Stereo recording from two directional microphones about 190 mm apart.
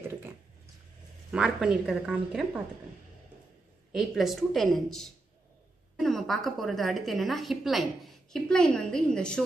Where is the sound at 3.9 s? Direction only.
Centre (ahead or behind).